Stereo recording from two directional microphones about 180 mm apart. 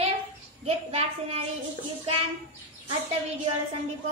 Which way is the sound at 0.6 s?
35° right (ahead or behind).